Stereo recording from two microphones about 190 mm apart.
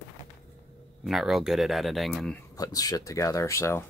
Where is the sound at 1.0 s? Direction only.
Centre (ahead or behind).